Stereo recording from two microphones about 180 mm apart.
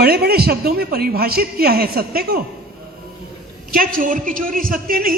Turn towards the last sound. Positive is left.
turn(degrees=-55)  # may be behind; listen again after turning